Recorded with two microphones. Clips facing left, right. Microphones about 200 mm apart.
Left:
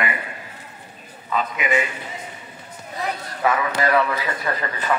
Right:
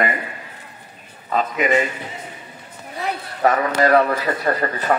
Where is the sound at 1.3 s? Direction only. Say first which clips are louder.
Right 4 dB; 40° right (ahead or behind).